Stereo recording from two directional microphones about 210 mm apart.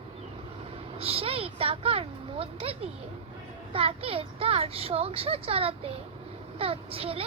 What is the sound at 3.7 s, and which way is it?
A child's voice, 25° right (ahead or behind).